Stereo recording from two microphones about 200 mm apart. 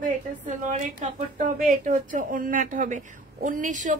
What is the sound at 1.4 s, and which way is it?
A woman's voice, 40° right (ahead or behind).